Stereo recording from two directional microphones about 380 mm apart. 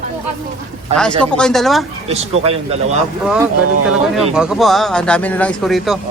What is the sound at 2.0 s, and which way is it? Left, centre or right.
Speech, centre.